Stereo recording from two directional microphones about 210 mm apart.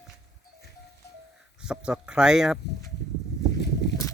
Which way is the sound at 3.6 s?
55° left (ahead or behind).